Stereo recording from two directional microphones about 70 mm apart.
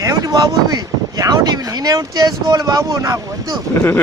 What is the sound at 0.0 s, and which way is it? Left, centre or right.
Speech, right.